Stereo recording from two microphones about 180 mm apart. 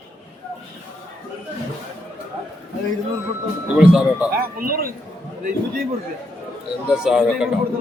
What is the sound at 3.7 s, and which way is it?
Speech, 5° right (ahead or behind).